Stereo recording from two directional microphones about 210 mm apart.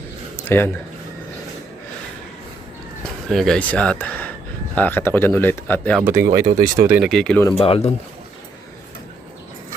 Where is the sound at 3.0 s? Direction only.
Centre (ahead or behind).